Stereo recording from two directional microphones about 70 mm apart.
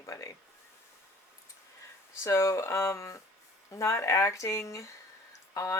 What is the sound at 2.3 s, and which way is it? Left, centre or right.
Speech, left.